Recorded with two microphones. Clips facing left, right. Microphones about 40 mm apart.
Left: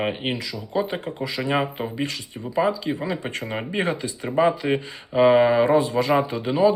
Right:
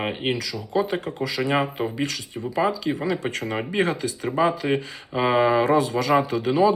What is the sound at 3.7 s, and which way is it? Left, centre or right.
Speech, left.